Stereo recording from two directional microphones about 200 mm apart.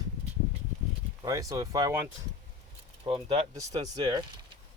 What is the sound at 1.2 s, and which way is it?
Speech, 20° right (ahead or behind).